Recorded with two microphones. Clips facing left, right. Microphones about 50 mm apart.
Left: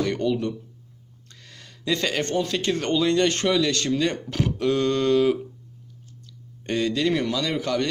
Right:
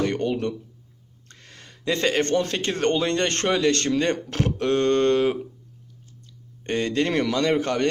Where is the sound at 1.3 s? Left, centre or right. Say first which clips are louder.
Right 1 dB; right.